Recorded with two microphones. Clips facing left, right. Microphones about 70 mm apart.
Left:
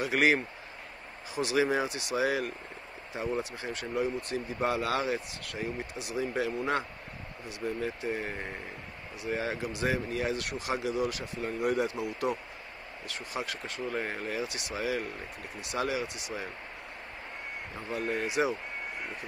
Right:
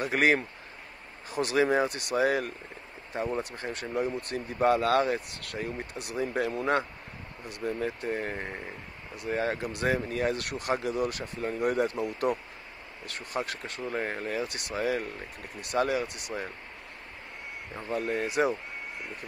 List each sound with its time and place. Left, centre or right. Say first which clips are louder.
0.0 s speech: right 1 dB; right
3.5 s speech: right 1 dB; right
13.0 s speech: right 3 dB; right
18.1 s speech: right 2 dB; right